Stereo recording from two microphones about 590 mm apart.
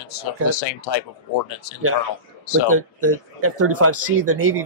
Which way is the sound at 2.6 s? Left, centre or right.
Right.